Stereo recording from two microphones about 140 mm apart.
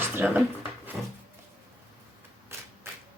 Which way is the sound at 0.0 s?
15° right (ahead or behind).